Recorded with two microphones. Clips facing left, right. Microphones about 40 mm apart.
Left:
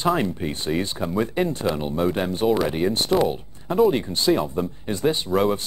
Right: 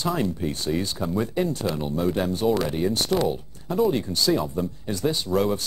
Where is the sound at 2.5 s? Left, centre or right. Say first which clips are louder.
Left 3 dB; centre.